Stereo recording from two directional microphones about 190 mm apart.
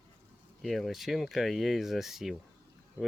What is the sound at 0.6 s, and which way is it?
Speech, centre (ahead or behind).